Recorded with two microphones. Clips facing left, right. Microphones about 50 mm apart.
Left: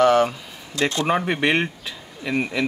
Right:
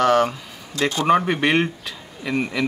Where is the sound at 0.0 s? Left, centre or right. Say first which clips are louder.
Left 1 dB; centre.